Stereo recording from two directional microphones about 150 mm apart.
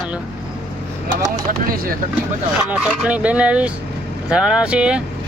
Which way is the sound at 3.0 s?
10° right (ahead or behind).